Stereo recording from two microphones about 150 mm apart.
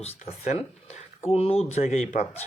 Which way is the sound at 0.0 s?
50° left (ahead or behind).